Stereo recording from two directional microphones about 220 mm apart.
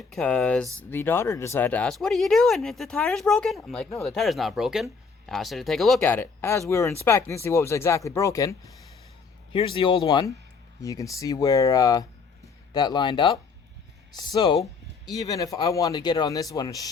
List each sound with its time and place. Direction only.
0.1 s speech: 5° left (ahead or behind)